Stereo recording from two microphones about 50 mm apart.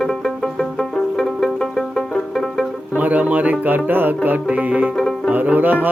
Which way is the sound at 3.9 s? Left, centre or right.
Right.